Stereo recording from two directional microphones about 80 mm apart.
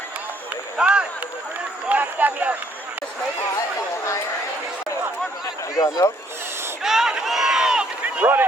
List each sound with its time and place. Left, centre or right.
0.5 s run: centre
1.9 s a sound: right
5.7 s speech: left
6.8 s run: centre
8.0 s run: centre